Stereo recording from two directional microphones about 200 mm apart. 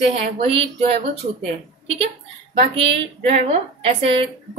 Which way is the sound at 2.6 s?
25° right (ahead or behind).